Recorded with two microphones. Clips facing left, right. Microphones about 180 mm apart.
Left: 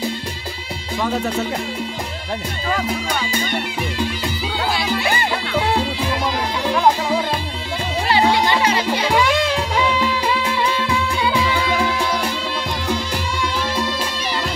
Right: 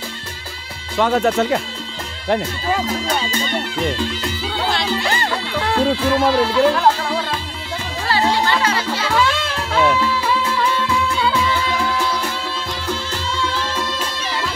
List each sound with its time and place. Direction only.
0.9 s speech: 80° right
3.1 s speech: 10° left (ahead or behind)
4.7 s music: 10° left (ahead or behind)
6.1 s speech: 15° left (ahead or behind)
8.1 s music: 15° left (ahead or behind)